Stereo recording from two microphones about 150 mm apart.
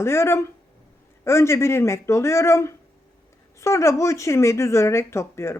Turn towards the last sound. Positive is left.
turn(degrees=20)  # may be behind; listen again after turning